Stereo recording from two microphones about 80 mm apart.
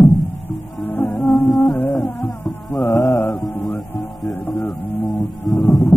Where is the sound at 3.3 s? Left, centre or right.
Centre.